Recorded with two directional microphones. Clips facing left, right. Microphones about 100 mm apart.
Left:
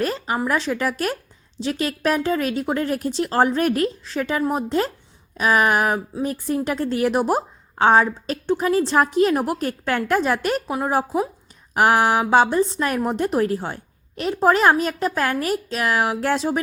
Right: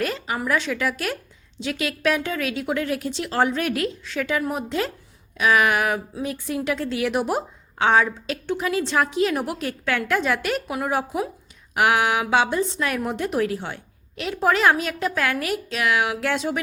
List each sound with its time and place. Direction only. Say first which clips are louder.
0.0 s a woman's voice: left 3 dB; 35° left (ahead or behind)